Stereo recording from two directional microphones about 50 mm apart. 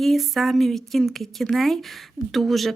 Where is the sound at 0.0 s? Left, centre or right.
Centre.